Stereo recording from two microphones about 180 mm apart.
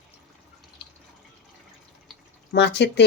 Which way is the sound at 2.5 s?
70° left (ahead or behind).